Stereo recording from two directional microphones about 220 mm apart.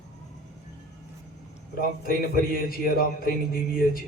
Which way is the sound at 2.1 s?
40° left (ahead or behind).